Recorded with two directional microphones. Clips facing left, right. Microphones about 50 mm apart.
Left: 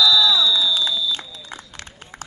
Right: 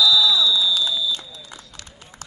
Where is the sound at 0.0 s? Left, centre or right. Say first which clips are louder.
Left 1 dB; centre.